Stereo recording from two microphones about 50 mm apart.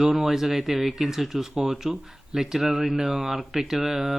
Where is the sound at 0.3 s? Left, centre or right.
Centre.